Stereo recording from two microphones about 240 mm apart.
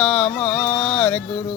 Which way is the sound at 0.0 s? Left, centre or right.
Centre.